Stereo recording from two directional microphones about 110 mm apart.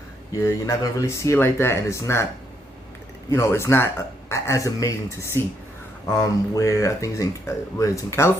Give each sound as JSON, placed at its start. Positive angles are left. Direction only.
{"t": 0.3, "sound": "speech", "side_deg": 25}
{"t": 3.2, "sound": "speech", "side_deg": 25}